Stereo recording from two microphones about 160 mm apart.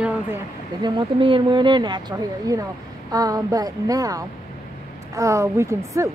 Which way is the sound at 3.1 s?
20° right (ahead or behind).